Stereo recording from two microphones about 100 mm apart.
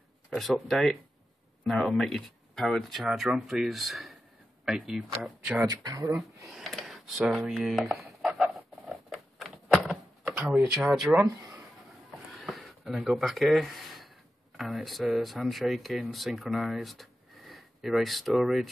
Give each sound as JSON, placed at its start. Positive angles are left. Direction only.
{"t": 0.3, "sound": "speech", "side_deg": 0}
{"t": 5.9, "sound": "speech", "side_deg": -35}
{"t": 6.5, "sound": "speech", "side_deg": 0}
{"t": 7.6, "sound": "a sound", "side_deg": 0}
{"t": 10.4, "sound": "speech", "side_deg": -5}
{"t": 12.3, "sound": "a sound", "side_deg": 0}
{"t": 14.6, "sound": "speech", "side_deg": 0}